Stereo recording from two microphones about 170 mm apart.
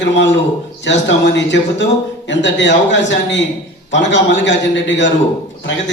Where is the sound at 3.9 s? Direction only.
90° left.